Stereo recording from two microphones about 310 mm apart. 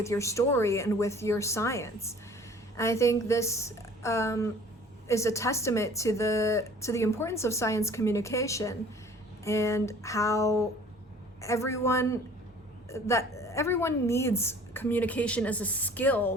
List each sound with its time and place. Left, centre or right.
0.0 s speech: centre